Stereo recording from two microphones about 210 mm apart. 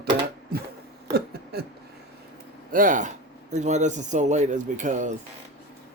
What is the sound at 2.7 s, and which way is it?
Speech, 40° right (ahead or behind).